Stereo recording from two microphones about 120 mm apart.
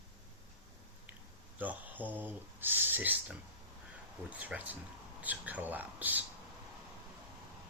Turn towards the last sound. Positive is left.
turn(degrees=-15)  # may be behind; listen again after turning